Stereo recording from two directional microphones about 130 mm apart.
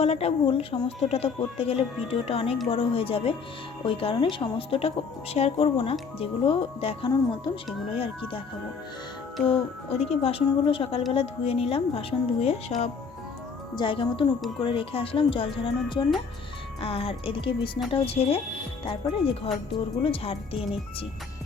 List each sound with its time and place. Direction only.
0.0 s speech: 55° left (ahead or behind)
9.5 s speech: 50° left (ahead or behind)
13.7 s a woman's voice: 40° left (ahead or behind)